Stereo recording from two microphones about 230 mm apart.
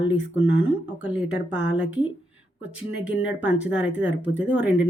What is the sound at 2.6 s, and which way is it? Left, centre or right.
Speech, centre.